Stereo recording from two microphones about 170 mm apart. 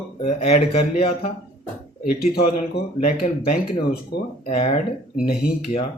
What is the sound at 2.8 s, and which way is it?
Speech, 75° left (ahead or behind).